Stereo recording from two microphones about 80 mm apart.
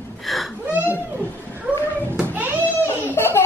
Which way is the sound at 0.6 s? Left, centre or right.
Centre.